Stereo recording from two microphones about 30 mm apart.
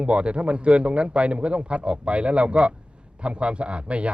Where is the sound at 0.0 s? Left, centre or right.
Right.